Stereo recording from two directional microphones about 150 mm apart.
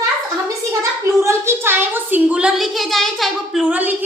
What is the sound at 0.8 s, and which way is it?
A woman's voice, 20° right (ahead or behind).